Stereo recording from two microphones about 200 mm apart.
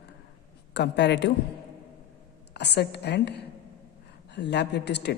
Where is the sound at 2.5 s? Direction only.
55° left (ahead or behind).